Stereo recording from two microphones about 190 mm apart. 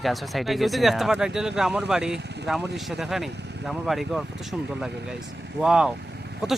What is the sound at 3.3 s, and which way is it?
Vehicle, 65° right (ahead or behind).